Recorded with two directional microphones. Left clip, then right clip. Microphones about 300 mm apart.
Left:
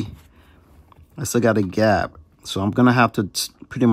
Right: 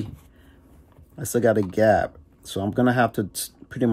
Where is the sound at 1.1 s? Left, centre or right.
Left.